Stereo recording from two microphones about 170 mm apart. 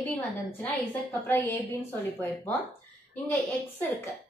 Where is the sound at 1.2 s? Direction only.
10° left (ahead or behind).